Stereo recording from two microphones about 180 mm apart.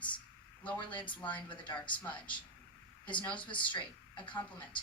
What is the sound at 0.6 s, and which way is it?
Speech, 10° left (ahead or behind).